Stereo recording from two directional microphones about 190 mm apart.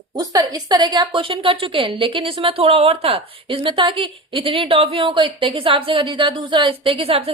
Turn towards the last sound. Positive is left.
turn(degrees=-30)  # may be behind; listen again after turning